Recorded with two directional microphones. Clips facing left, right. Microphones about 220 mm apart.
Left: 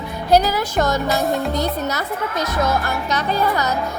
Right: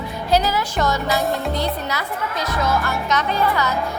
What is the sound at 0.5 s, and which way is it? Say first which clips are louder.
Music: left 2 dB; 45° left (ahead or behind).